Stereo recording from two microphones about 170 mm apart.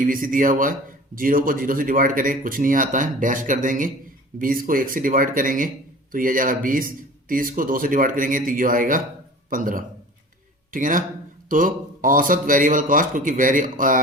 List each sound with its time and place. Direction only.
0.0 s speech: 55° right (ahead or behind)